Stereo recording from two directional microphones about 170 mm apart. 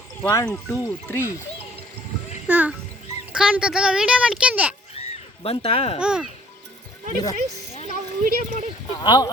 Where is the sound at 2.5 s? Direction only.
10° right (ahead or behind).